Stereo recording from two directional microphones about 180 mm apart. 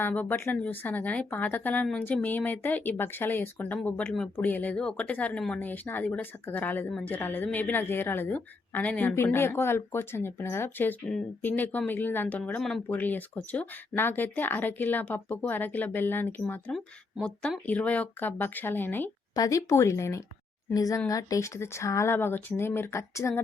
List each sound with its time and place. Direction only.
0.0 s a woman's voice: 10° left (ahead or behind)